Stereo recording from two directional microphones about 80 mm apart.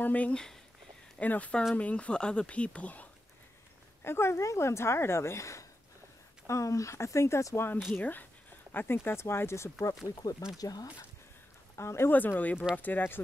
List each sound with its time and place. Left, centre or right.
0.0 s speech: centre
4.0 s speech: left
10.2 s speech: left
11.7 s speech: left
12.1 s speech: left